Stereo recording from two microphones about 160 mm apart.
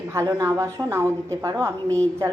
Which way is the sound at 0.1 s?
20° right (ahead or behind).